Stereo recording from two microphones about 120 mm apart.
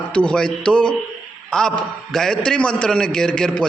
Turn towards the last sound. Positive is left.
turn(degrees=5)  # may be behind; listen again after turning